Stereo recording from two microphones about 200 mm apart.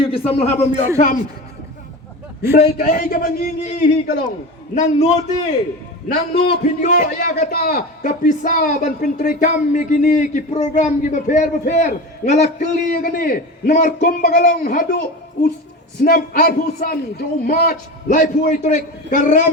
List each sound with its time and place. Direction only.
0.3 s a man's voice: 30° left (ahead or behind)
2.5 s a man's voice: 50° left (ahead or behind)
4.7 s a man's voice: 35° left (ahead or behind)
6.9 s a man's voice: 45° left (ahead or behind)
16.0 s a man's voice: 45° left (ahead or behind)